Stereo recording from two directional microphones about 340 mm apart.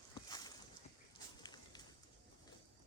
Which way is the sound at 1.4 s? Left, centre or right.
Centre.